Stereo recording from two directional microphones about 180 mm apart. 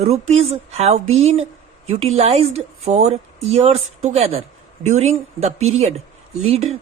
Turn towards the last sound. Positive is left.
turn(degrees=-35)  # may be behind; listen again after turning